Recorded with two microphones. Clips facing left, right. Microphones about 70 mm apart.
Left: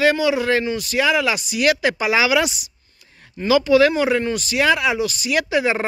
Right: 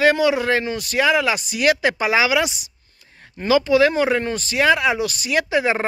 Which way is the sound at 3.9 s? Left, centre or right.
Right.